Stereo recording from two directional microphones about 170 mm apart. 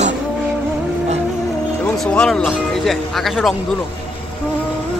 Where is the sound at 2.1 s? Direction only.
5° left (ahead or behind).